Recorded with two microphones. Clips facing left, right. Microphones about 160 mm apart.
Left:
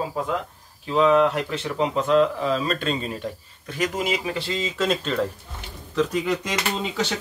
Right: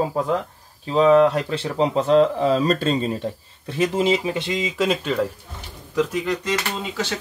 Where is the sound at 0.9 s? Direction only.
30° right (ahead or behind); by 5.1 s 10° right (ahead or behind).